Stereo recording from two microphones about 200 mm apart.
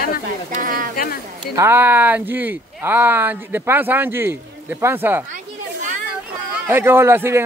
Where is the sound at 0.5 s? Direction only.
45° right (ahead or behind).